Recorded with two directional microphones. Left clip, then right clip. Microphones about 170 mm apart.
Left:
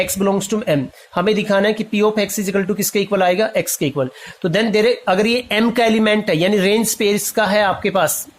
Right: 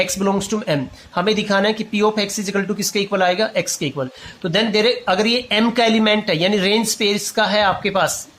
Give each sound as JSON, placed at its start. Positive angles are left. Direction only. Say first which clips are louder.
{"t": 0.0, "sound": "speech", "louder": "left 1 dB", "side_deg": 25}